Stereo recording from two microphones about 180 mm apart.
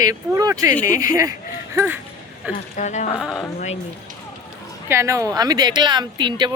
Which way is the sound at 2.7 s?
40° left (ahead or behind).